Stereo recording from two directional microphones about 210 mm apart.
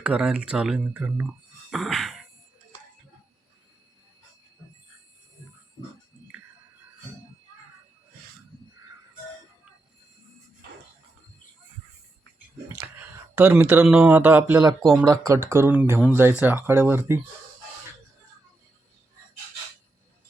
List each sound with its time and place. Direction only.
0.0 s speech: 5° right (ahead or behind)
12.6 s speech: 10° right (ahead or behind)
14.8 s speech: centre (ahead or behind)
15.0 s speech: 15° right (ahead or behind)